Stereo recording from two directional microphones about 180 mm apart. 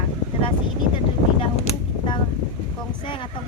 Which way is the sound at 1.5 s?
30° left (ahead or behind).